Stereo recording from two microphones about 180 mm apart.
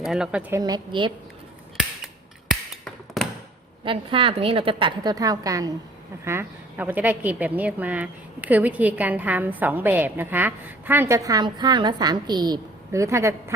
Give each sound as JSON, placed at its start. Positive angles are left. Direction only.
{"t": 0.0, "sound": "a woman's voice", "side_deg": -5}
{"t": 0.6, "sound": "a woman's voice", "side_deg": -25}
{"t": 3.2, "sound": "a sound", "side_deg": 0}
{"t": 3.8, "sound": "a woman's voice", "side_deg": -30}